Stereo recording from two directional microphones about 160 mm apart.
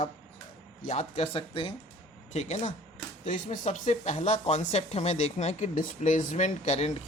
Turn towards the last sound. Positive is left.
turn(degrees=45)  # may be behind; listen again after turning